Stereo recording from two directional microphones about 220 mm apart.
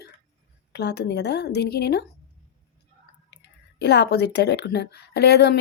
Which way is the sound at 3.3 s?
50° left (ahead or behind).